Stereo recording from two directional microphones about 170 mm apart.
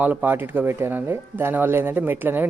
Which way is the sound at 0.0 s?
10° right (ahead or behind).